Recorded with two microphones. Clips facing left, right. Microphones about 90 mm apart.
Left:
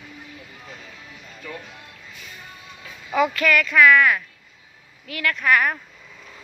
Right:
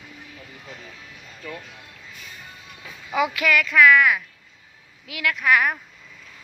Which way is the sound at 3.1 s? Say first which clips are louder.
Left 2 dB; 5° right (ahead or behind).